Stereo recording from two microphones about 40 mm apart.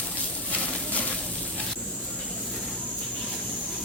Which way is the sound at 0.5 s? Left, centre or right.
Left.